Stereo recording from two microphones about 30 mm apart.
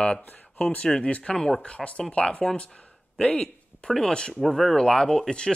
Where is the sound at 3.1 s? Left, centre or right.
Left.